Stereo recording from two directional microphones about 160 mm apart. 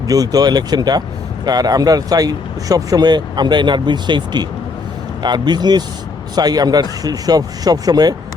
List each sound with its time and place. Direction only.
0.1 s speech: 25° right (ahead or behind)